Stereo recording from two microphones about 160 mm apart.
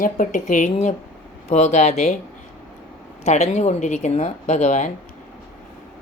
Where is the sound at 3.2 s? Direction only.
45° left (ahead or behind).